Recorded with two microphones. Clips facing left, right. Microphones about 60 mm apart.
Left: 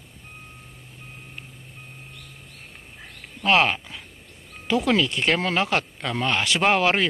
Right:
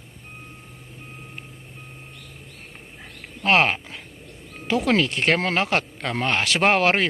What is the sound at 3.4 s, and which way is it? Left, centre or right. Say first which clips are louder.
Speech: right 1 dB; right.